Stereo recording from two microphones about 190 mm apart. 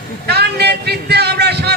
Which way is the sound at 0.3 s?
60° right (ahead or behind).